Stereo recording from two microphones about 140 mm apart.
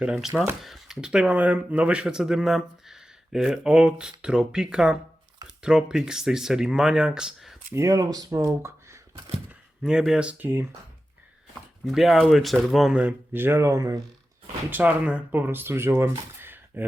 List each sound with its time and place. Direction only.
0.0 s speech: 5° right (ahead or behind)
7.7 s speech: 20° right (ahead or behind)
9.1 s a sound: 35° right (ahead or behind)
9.5 s speech: 5° right (ahead or behind)
11.9 s speech: centre (ahead or behind); by 14.0 s 25° right (ahead or behind)
14.7 s speech: 10° right (ahead or behind)
16.4 s a sound: 15° right (ahead or behind)